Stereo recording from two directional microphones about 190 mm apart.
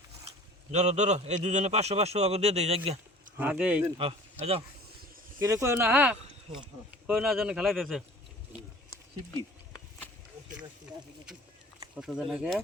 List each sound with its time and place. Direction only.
0.7 s a man's voice: 35° right (ahead or behind)
3.3 s speech: 5° right (ahead or behind)
3.9 s speech: 30° right (ahead or behind)
5.4 s speech: 15° right (ahead or behind); by 8.0 s centre (ahead or behind)
11.9 s speech: 5° right (ahead or behind)